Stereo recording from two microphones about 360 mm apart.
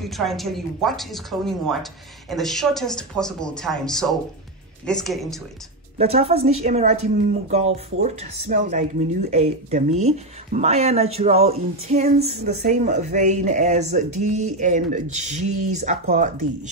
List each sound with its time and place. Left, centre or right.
0.0 s speech: centre
5.9 s a woman's voice: centre